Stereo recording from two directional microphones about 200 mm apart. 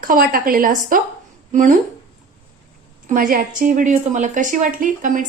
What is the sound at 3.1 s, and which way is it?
A woman's voice, 45° right (ahead or behind).